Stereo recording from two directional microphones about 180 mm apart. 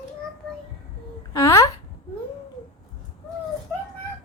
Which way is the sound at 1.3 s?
15° left (ahead or behind).